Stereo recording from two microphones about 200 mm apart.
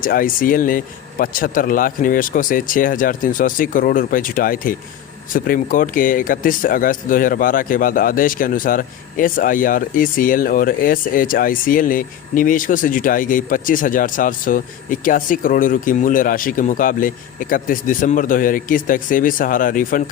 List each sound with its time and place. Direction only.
0.0 s speech: 45° left (ahead or behind)